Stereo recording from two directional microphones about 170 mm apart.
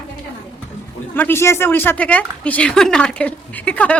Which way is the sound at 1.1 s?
15° left (ahead or behind).